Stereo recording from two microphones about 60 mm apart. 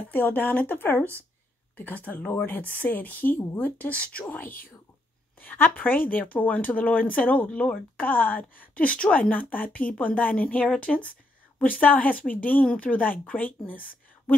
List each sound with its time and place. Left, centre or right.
0.1 s a woman's voice: left